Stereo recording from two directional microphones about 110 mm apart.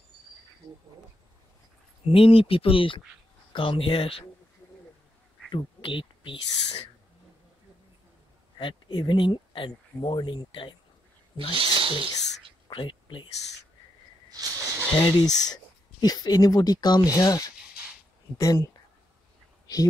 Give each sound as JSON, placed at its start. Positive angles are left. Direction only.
{"t": 2.0, "sound": "speech", "side_deg": 55}
{"t": 5.5, "sound": "speech", "side_deg": 50}
{"t": 8.5, "sound": "speech", "side_deg": 45}
{"t": 11.5, "sound": "speech", "side_deg": -55}
{"t": 12.6, "sound": "a sound", "side_deg": 50}
{"t": 14.3, "sound": "snake", "side_deg": -25}
{"t": 15.0, "sound": "speech", "side_deg": 45}